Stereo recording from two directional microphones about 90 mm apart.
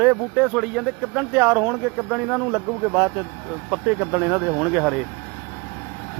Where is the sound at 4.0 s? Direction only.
25° right (ahead or behind).